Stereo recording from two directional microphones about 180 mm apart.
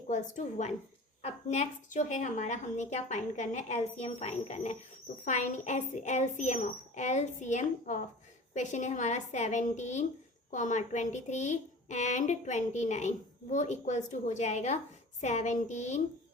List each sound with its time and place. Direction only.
0.1 s speech: 40° left (ahead or behind)